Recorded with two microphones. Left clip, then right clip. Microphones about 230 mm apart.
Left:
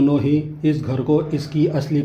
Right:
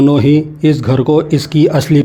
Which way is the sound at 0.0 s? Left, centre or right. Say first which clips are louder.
Right 8 dB; right.